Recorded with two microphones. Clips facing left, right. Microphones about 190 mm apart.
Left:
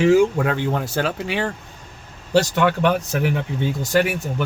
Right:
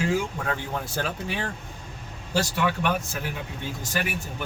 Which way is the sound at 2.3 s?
70° left (ahead or behind).